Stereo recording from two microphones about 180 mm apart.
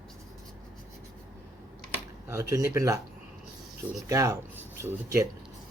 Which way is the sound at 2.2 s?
15° right (ahead or behind).